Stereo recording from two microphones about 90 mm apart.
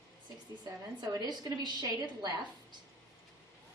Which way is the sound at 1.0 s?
50° right (ahead or behind).